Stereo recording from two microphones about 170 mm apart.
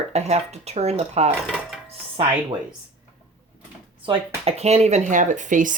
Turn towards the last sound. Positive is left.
turn(degrees=-50)  # may be behind; listen again after turning